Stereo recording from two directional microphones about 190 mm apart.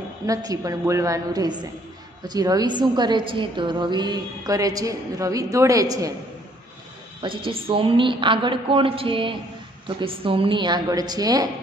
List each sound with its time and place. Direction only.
0.3 s a woman's voice: 20° right (ahead or behind)
7.2 s a woman's voice: 25° right (ahead or behind)